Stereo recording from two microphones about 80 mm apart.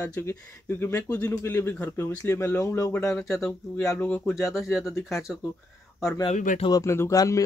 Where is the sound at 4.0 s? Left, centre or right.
Centre.